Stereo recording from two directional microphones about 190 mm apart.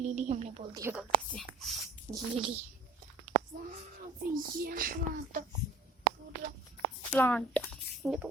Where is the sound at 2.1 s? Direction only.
25° right (ahead or behind).